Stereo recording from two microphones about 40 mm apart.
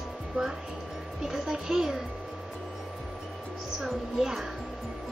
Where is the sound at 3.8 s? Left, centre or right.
Centre.